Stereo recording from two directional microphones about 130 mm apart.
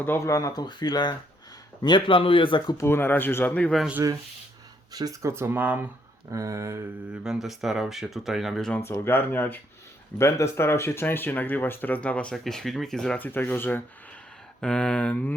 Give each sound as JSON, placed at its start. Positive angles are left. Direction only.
{"t": 0.0, "sound": "speech", "side_deg": 20}
{"t": 2.7, "sound": "speech", "side_deg": 20}
{"t": 4.9, "sound": "speech", "side_deg": -30}
{"t": 6.3, "sound": "speech", "side_deg": -25}
{"t": 7.3, "sound": "speech", "side_deg": 0}
{"t": 8.7, "sound": "speech", "side_deg": 15}